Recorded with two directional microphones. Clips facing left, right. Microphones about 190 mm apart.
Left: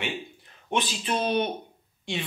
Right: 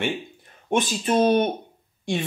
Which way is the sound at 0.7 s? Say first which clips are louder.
Right 6 dB; 45° right (ahead or behind).